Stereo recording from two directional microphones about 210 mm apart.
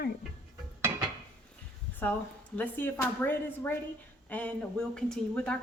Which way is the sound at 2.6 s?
10° left (ahead or behind).